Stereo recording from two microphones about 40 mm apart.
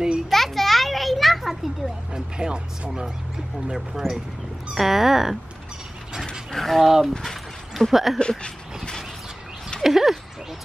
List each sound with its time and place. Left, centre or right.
0.3 s children playing: centre
2.1 s speech: right
4.0 s speech: centre
4.7 s speech: centre
6.5 s mechanisms: centre
6.8 s speech: centre
8.2 s a sound: left
9.8 s speech: centre